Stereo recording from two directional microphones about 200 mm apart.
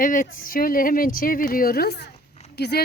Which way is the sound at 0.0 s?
40° left (ahead or behind).